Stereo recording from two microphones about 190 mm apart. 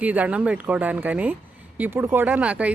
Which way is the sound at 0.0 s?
10° right (ahead or behind).